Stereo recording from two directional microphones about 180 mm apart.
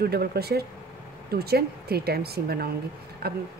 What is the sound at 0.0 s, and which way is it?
Speech, 60° right (ahead or behind).